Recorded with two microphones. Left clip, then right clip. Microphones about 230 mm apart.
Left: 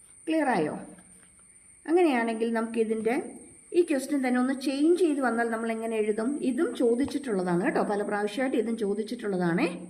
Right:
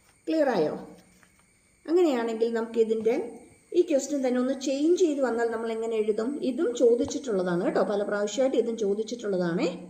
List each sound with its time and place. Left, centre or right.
0.3 s a woman's voice: left
1.8 s a woman's voice: left